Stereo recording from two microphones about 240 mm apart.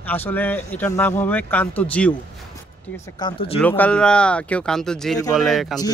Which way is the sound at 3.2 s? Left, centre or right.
Left.